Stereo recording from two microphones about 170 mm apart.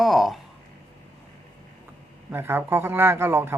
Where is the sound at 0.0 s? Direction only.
Centre (ahead or behind).